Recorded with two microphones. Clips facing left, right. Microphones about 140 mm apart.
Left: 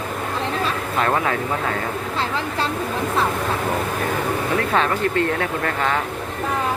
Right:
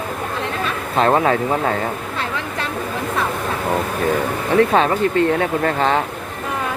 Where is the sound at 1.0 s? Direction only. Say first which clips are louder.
Right 6 dB; 30° right (ahead or behind).